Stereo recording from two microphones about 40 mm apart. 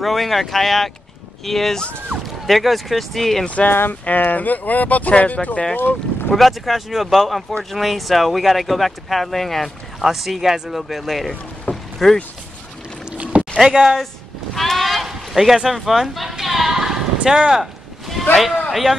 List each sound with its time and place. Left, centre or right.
0.0 s speech: centre
3.4 s speech: left
4.0 s speech: left
5.8 s speech: left
6.3 s speech: centre
11.7 s rowboat: centre
13.3 s a sound: right
14.5 s a sound: centre
17.3 s speech: centre
17.6 s a sound: centre
18.3 s speech: centre